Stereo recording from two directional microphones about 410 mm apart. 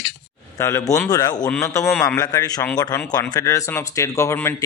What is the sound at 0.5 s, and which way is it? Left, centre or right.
A man's voice, centre.